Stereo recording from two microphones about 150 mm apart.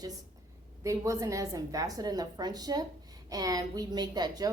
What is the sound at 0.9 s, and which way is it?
A woman's voice, 20° right (ahead or behind).